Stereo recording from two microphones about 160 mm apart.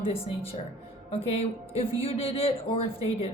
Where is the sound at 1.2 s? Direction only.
40° left (ahead or behind).